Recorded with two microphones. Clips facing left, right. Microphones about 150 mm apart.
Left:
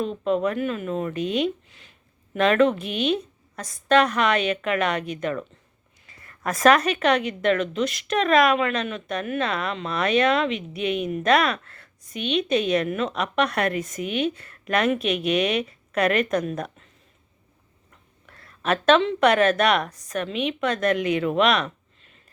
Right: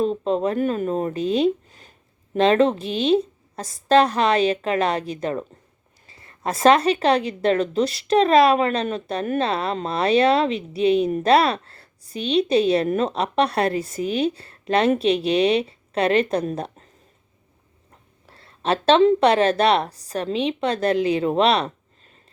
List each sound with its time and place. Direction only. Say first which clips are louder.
0.0 s a woman's voice: right 2 dB; 35° right (ahead or behind)
18.3 s a woman's voice: right 2 dB; 30° right (ahead or behind)